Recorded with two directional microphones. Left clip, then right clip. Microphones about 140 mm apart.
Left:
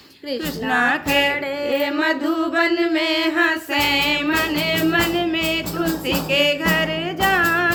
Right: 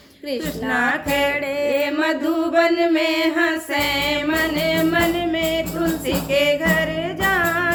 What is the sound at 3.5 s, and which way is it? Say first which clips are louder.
Female singing: left 2 dB; 15° right (ahead or behind).